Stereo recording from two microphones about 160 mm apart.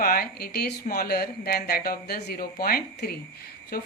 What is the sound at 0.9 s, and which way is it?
Speech, 70° left (ahead or behind).